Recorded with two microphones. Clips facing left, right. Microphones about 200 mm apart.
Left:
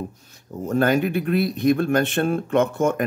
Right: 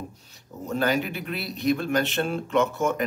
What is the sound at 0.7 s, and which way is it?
Speech, 50° left (ahead or behind).